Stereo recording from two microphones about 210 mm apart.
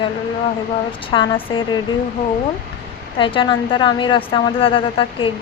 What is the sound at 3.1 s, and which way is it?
A woman's voice, 25° left (ahead or behind).